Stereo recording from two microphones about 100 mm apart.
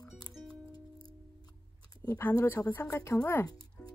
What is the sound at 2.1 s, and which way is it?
Speech, 20° left (ahead or behind).